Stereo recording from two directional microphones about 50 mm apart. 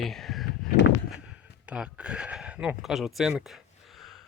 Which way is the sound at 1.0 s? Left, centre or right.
Centre.